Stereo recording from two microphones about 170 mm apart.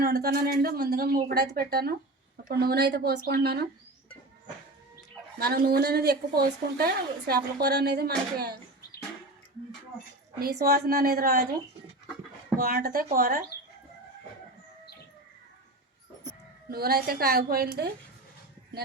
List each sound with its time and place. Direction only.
0.0 s speech: 65° right (ahead or behind)
5.4 s a woman's voice: 65° right (ahead or behind)
10.4 s speech: 65° right (ahead or behind)
12.5 s speech: 60° right (ahead or behind)
16.6 s speech: 65° right (ahead or behind)